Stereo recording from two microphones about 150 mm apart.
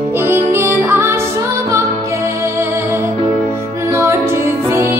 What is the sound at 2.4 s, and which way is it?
Music, 15° right (ahead or behind).